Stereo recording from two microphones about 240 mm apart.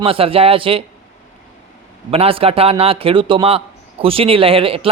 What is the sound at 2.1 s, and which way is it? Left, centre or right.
Speech, right.